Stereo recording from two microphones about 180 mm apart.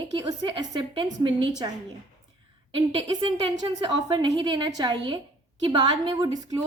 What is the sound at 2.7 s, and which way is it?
A woman's voice, 30° right (ahead or behind).